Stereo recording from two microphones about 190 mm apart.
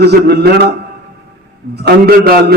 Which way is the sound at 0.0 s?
60° right (ahead or behind).